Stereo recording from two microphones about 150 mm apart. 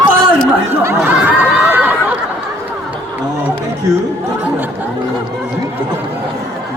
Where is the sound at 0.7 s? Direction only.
15° right (ahead or behind).